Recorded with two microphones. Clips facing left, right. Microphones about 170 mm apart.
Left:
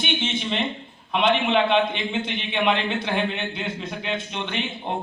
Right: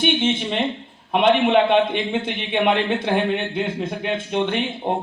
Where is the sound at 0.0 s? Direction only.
55° right (ahead or behind).